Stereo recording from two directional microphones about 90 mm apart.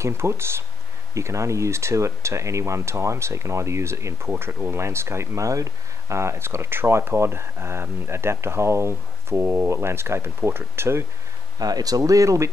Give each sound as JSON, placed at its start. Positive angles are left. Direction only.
{"t": 0.0, "sound": "speech", "side_deg": -30}
{"t": 11.6, "sound": "speech", "side_deg": -45}